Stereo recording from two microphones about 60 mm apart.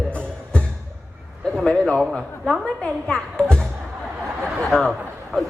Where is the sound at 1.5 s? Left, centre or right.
Centre.